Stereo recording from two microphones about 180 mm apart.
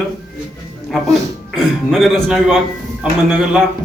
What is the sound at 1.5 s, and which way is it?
Speech, centre (ahead or behind).